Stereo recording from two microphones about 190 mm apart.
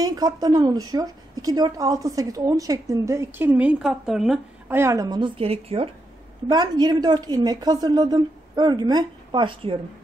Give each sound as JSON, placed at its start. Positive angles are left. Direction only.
{"t": 0.0, "sound": "a woman's voice", "side_deg": -20}
{"t": 4.7, "sound": "a woman's voice", "side_deg": -15}